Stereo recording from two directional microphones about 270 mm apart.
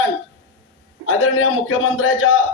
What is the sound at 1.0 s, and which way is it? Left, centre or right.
A man's voice, left.